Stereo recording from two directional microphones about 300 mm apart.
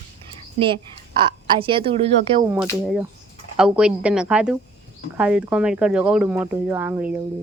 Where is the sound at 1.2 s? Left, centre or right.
Centre.